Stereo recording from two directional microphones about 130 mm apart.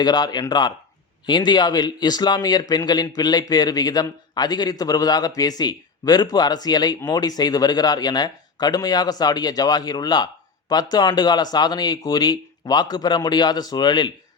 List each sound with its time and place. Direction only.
0.0 s a man's voice: 30° left (ahead or behind)